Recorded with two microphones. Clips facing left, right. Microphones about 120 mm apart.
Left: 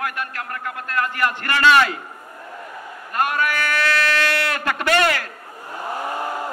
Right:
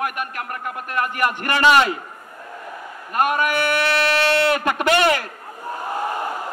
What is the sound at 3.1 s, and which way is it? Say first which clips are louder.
Speech: right 2 dB; 15° right (ahead or behind).